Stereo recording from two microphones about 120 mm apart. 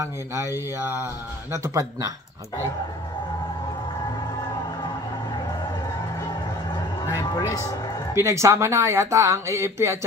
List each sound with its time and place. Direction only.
0.0 s speech: 25° right (ahead or behind)
7.1 s music: 35° left (ahead or behind)
8.1 s speech: 25° right (ahead or behind)